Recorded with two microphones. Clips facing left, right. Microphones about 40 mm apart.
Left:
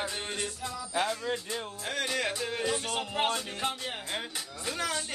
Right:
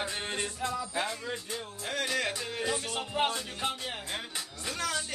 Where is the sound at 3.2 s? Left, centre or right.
Centre.